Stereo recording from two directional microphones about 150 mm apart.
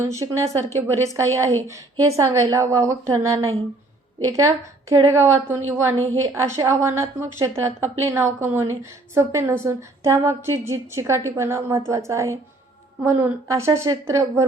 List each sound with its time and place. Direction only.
0.0 s a woman's voice: 20° right (ahead or behind)